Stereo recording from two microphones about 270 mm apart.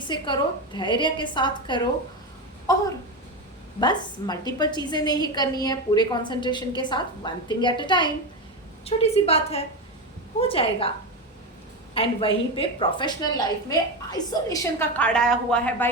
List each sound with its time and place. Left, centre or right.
0.0 s a woman's voice: centre
11.9 s a woman's voice: centre